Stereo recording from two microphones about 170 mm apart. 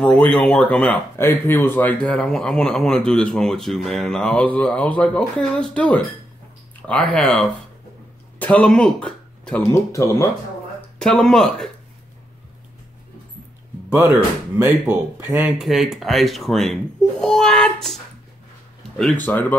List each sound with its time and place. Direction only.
0.0 s speech: 5° left (ahead or behind)
9.6 s speech: 20° left (ahead or behind)
11.0 s speech: 5° left (ahead or behind)
14.6 s speech: 10° right (ahead or behind); by 19.4 s 10° left (ahead or behind)